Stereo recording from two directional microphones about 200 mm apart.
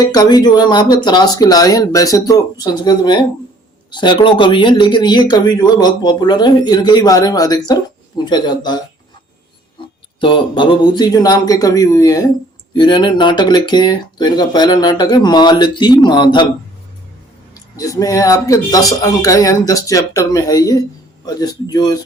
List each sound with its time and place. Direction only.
0.0 s speech: 20° left (ahead or behind)
10.2 s speech: 25° left (ahead or behind)
17.5 s speech: 15° left (ahead or behind)